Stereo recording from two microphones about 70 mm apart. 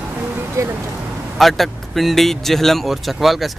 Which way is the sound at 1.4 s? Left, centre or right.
Centre.